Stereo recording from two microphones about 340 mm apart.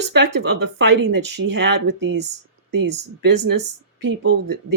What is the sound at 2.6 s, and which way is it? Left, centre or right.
Speech, right.